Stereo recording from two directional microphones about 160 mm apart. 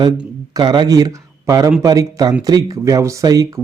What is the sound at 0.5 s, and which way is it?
Speech, 25° right (ahead or behind).